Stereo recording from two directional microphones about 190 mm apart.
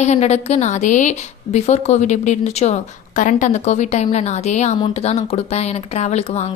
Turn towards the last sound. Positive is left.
turn(degrees=35)  # may be behind; listen again after turning